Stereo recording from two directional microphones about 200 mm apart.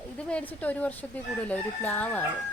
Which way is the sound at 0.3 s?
5° left (ahead or behind).